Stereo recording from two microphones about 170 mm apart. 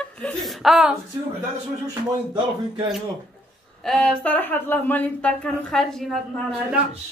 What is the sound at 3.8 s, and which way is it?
Speech, 5° left (ahead or behind).